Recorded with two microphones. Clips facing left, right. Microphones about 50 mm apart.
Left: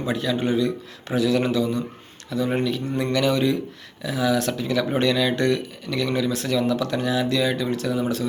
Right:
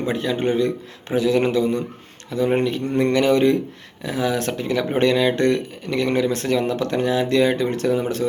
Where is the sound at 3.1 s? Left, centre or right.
Right.